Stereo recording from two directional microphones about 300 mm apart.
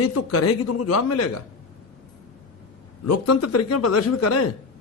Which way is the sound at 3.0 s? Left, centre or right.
Left.